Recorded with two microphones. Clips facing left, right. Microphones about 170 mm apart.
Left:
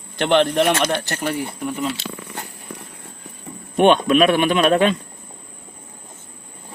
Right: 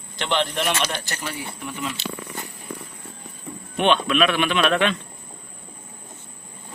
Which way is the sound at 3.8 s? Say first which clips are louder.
Left 6 dB; 45° left (ahead or behind).